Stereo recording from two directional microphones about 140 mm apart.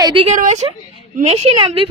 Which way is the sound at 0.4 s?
55° right (ahead or behind).